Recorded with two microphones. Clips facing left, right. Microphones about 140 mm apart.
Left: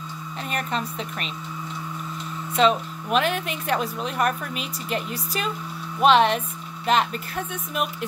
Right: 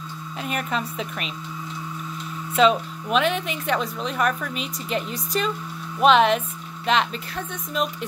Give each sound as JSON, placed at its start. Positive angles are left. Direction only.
{"t": 0.5, "sound": "speech", "side_deg": -5}
{"t": 2.5, "sound": "speech", "side_deg": 0}